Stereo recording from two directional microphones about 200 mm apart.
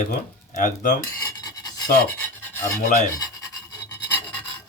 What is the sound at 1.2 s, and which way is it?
Filing, 20° left (ahead or behind).